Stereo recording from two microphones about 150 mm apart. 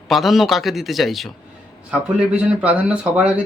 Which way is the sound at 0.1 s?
Centre (ahead or behind).